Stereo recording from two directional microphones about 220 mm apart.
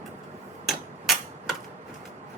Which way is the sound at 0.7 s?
Centre (ahead or behind).